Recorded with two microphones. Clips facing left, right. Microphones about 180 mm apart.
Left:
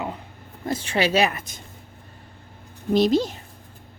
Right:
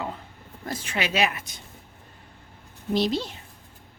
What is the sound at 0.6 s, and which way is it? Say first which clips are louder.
Speech: left 7 dB; 30° left (ahead or behind).